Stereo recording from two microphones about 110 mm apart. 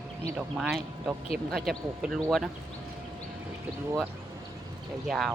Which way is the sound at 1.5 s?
Centre (ahead or behind).